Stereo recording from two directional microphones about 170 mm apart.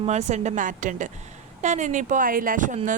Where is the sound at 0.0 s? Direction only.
40° right (ahead or behind).